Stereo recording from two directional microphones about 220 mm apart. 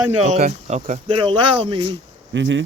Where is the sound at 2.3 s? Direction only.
55° right (ahead or behind).